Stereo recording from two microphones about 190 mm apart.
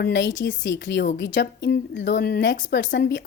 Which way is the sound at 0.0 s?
70° left (ahead or behind).